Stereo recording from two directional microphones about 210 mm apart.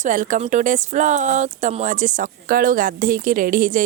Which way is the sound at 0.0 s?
40° right (ahead or behind).